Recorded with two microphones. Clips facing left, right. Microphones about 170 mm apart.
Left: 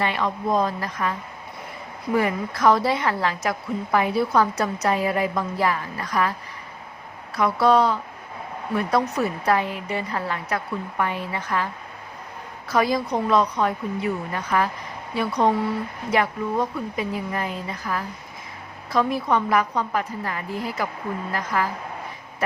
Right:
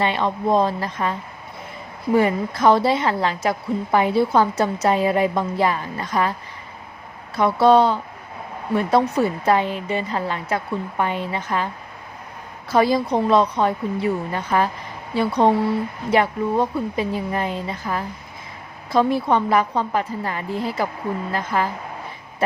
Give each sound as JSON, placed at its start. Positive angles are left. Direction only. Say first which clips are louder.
{"t": 0.0, "sound": "a woman's voice", "louder": "right 3 dB", "side_deg": -25}
{"t": 2.1, "sound": "a woman's voice", "louder": "right 4 dB", "side_deg": -25}
{"t": 7.3, "sound": "a woman's voice", "louder": "right 4 dB", "side_deg": -25}